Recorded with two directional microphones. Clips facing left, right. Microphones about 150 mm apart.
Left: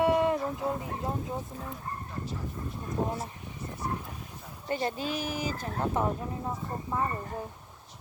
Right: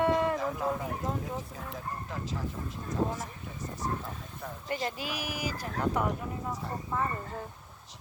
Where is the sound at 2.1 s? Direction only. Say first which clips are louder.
Right 1 dB; 90° right.